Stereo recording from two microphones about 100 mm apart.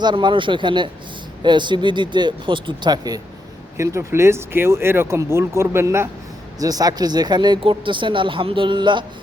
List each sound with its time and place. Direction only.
0.0 s speech: 50° right (ahead or behind)
3.8 s speech: 25° right (ahead or behind)
6.6 s speech: 40° right (ahead or behind)